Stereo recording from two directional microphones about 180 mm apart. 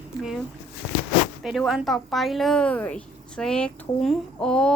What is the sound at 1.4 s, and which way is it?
A woman's voice, 5° right (ahead or behind).